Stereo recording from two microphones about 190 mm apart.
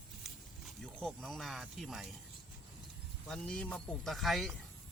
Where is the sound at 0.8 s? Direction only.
Centre (ahead or behind).